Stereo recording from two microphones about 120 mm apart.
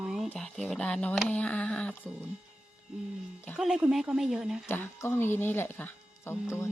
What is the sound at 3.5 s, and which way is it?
Speech, 5° right (ahead or behind).